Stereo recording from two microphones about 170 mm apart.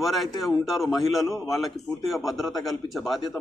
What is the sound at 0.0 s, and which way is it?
A man's voice, centre (ahead or behind).